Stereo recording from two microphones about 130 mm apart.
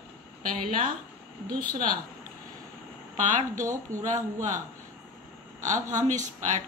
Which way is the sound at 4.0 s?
70° right (ahead or behind).